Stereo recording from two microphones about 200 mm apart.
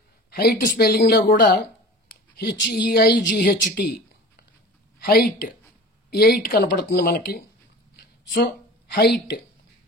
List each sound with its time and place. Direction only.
0.3 s a woman's voice: 50° left (ahead or behind)
4.9 s a woman's voice: 50° left (ahead or behind)
8.9 s a woman's voice: 50° left (ahead or behind)